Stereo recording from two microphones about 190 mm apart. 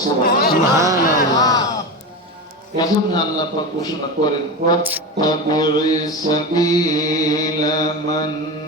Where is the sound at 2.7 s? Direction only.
20° left (ahead or behind).